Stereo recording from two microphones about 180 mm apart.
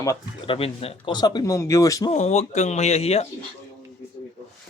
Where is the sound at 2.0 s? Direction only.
35° left (ahead or behind).